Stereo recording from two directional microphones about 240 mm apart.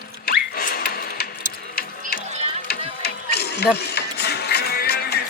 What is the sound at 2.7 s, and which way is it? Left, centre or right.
Music, left.